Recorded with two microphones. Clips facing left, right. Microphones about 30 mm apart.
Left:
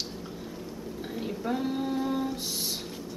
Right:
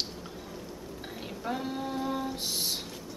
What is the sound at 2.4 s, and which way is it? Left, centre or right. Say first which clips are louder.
Music: right 1 dB; centre.